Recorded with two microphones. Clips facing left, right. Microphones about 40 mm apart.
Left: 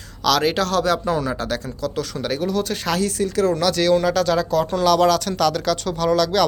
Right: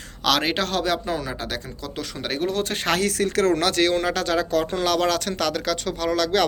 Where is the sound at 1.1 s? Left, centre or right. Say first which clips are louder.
Left 5 dB; centre; by 3.0 s right.